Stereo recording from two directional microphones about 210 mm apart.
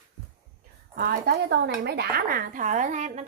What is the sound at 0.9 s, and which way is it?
Speech, 50° right (ahead or behind).